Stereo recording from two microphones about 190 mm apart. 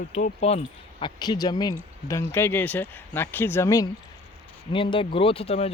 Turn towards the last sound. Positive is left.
turn(degrees=30)  # may be behind; listen again after turning